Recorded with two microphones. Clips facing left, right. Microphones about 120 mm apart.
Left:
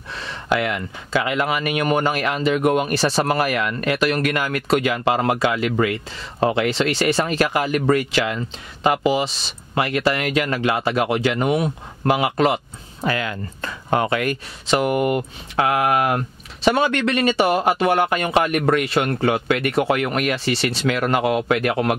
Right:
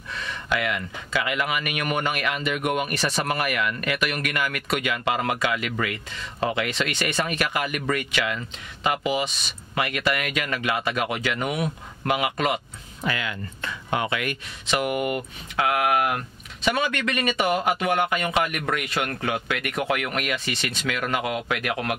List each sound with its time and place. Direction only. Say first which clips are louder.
0.1 s speech: left 5 dB; 30° left (ahead or behind)